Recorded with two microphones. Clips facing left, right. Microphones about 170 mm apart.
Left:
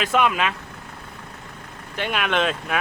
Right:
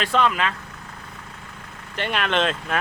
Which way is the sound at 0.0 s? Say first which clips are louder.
Left 1 dB; 10° left (ahead or behind).